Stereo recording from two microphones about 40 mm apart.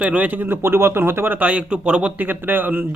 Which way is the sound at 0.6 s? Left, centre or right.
Right.